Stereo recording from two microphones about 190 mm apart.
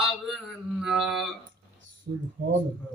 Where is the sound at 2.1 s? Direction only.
45° right (ahead or behind).